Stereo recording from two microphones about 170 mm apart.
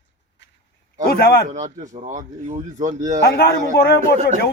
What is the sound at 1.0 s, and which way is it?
Speech, 65° left (ahead or behind).